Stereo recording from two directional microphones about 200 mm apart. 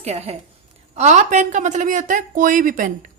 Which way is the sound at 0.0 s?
30° right (ahead or behind).